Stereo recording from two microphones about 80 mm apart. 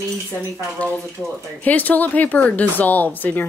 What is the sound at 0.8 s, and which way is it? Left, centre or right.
A woman's voice, centre.